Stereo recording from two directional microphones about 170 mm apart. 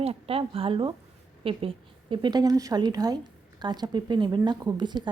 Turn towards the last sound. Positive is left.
turn(degrees=-25)  # may be behind; listen again after turning